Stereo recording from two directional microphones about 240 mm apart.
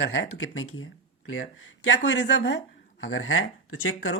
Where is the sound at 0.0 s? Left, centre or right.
Left.